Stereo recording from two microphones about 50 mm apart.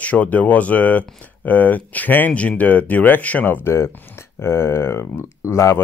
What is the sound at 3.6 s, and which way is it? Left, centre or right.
Speech, left.